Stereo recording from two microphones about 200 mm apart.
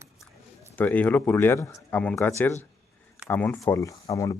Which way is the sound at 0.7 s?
10° left (ahead or behind).